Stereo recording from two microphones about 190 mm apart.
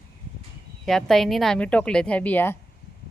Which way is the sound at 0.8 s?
Centre (ahead or behind).